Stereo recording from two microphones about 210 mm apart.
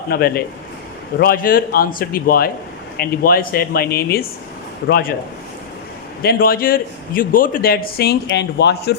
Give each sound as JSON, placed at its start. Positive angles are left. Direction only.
{"t": 0.1, "sound": "a man's voice", "side_deg": 45}
{"t": 6.2, "sound": "a man's voice", "side_deg": 45}